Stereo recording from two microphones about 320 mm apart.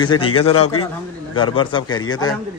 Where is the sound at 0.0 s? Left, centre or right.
Centre.